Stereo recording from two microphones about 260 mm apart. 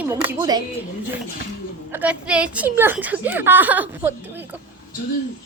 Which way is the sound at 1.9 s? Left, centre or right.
Centre.